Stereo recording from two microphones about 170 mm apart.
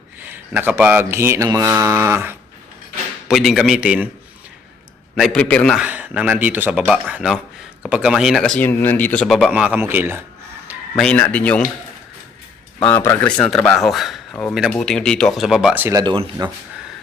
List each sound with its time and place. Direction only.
0.3 s speech: 10° right (ahead or behind)
3.2 s speech: centre (ahead or behind)
5.1 s speech: centre (ahead or behind)
5.7 s speech: 10° right (ahead or behind)
10.9 s speech: 5° left (ahead or behind)
12.8 s speech: 15° left (ahead or behind); by 16.0 s 10° right (ahead or behind)
16.0 s speech: 30° right (ahead or behind)